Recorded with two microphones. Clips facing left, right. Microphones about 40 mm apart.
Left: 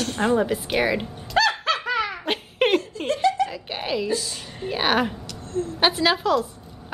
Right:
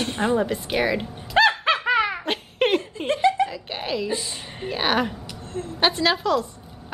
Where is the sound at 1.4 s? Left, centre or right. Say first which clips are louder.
Right 3 dB; right.